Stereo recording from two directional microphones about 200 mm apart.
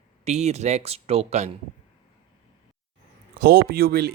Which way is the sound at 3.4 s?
50° right (ahead or behind).